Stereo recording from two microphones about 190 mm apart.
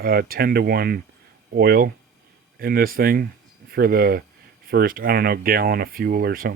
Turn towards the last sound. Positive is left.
turn(degrees=-50)  # may be behind; listen again after turning